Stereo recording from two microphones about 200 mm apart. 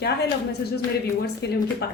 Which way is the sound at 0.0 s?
55° left (ahead or behind).